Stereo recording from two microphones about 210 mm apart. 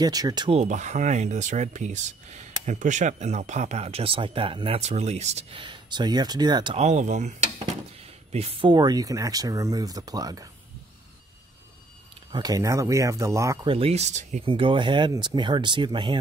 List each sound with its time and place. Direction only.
0.0 s speech: 20° right (ahead or behind)
12.3 s speech: 20° right (ahead or behind)